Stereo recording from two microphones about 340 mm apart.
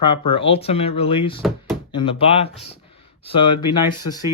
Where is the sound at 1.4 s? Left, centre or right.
Centre.